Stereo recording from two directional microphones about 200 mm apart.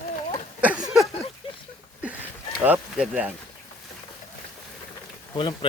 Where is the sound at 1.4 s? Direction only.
25° left (ahead or behind).